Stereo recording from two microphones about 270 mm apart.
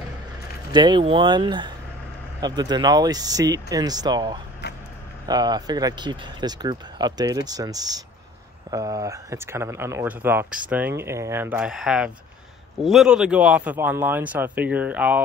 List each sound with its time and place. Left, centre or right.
0.7 s speech: centre